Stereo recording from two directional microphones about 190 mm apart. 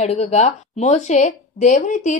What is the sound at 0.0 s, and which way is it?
A woman's voice, 35° left (ahead or behind).